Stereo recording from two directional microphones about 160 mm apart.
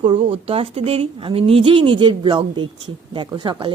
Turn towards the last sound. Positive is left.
turn(degrees=-30)  # may be behind; listen again after turning